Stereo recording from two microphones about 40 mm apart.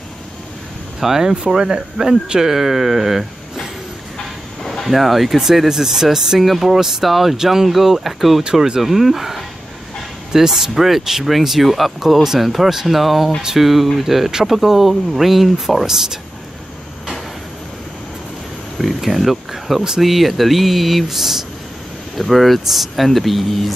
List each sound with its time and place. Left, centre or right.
1.0 s speech: centre
4.8 s speech: centre
18.8 s speech: centre